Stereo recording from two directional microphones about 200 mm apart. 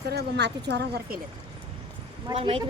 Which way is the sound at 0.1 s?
55° right (ahead or behind).